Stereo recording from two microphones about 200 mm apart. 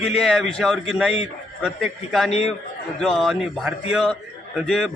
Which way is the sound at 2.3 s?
30° left (ahead or behind).